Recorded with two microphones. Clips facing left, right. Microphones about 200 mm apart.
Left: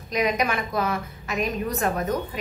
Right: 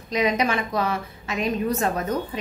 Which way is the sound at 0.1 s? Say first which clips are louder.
Right 2 dB; 30° right (ahead or behind).